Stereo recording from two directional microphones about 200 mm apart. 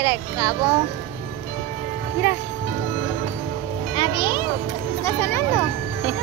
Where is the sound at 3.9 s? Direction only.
25° left (ahead or behind).